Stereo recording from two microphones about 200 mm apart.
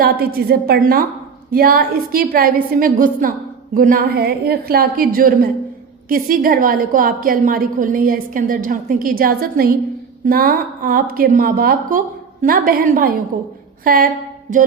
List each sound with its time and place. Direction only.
0.0 s a woman's voice: 50° right (ahead or behind)